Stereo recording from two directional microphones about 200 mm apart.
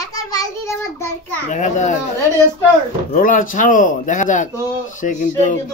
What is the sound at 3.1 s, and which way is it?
Speech, 45° left (ahead or behind).